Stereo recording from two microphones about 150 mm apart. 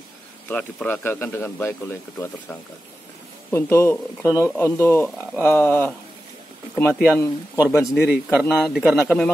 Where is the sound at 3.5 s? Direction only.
15° left (ahead or behind).